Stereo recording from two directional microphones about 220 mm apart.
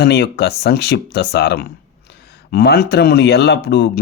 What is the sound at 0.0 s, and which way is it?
Speech, 50° left (ahead or behind).